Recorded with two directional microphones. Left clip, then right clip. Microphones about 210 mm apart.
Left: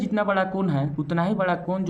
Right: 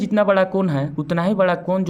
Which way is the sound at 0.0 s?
40° right (ahead or behind).